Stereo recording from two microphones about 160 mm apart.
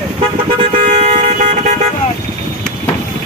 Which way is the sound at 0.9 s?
50° right (ahead or behind).